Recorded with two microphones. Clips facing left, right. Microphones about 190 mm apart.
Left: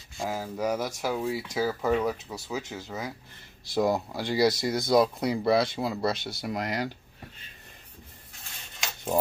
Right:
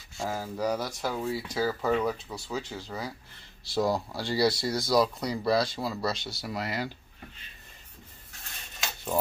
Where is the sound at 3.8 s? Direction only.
20° left (ahead or behind).